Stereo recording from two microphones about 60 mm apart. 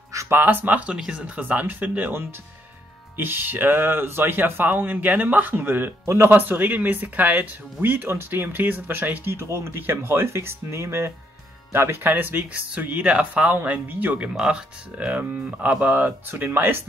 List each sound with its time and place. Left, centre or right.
0.3 s speech: right
0.9 s speech: centre
1.4 s speech: right
6.0 s speech: right
6.3 s speech: right